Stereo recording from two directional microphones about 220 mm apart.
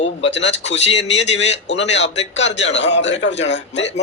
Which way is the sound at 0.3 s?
55° left (ahead or behind).